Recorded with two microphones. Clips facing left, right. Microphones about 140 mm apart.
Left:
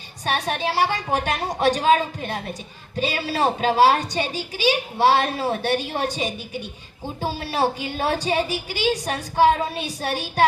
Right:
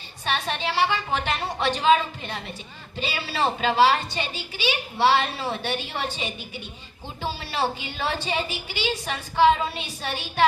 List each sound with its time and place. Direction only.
0.3 s a woman's voice: 45° left (ahead or behind)
1.3 s a woman's voice: 15° left (ahead or behind)
1.5 s a woman's voice: 40° left (ahead or behind)
7.3 s a woman's voice: 15° left (ahead or behind)
7.8 s a woman's voice: 45° left (ahead or behind)